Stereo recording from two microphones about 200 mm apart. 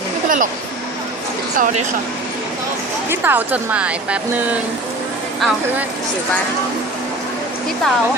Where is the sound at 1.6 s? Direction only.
35° right (ahead or behind).